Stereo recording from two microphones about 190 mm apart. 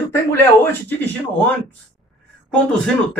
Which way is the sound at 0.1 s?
10° left (ahead or behind).